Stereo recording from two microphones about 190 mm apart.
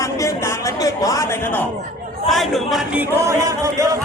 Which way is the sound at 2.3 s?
Centre (ahead or behind).